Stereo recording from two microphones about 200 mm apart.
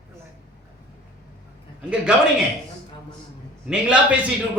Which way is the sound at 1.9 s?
5° right (ahead or behind).